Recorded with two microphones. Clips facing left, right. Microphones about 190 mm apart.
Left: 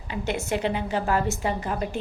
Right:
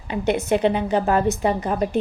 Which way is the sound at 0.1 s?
20° right (ahead or behind).